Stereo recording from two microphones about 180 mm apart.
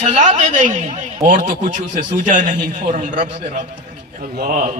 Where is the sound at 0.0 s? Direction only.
40° right (ahead or behind).